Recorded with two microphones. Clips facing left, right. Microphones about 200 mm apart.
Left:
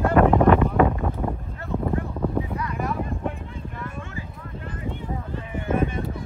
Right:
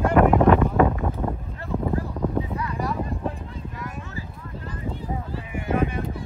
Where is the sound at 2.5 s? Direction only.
30° right (ahead or behind).